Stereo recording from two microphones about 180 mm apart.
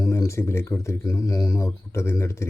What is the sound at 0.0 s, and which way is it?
Speech, 20° left (ahead or behind).